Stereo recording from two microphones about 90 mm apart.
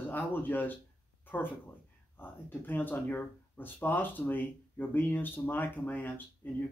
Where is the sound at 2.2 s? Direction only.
20° left (ahead or behind).